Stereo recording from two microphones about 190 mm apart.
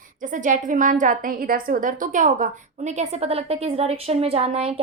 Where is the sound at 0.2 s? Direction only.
40° right (ahead or behind).